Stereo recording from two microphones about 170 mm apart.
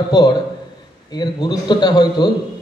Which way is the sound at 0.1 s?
25° left (ahead or behind).